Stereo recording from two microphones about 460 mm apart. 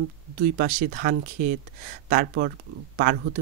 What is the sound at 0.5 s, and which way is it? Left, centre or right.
Speech, centre.